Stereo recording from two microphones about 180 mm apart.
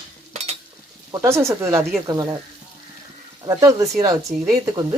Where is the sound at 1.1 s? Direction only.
15° right (ahead or behind).